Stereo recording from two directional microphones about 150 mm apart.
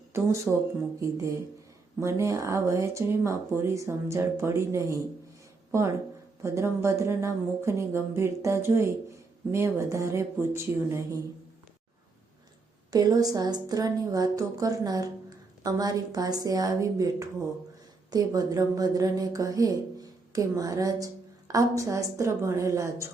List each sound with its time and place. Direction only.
0.1 s speech: 20° right (ahead or behind)
6.4 s speech: 20° right (ahead or behind)
12.9 s speech: 25° right (ahead or behind)